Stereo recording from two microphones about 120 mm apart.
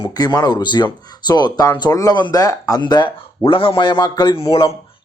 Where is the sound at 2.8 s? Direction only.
40° left (ahead or behind).